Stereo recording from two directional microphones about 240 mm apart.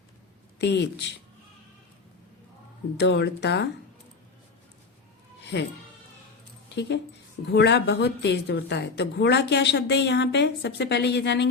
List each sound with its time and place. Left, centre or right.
0.6 s speech: left
3.0 s speech: left
5.4 s music: left
6.7 s speech: left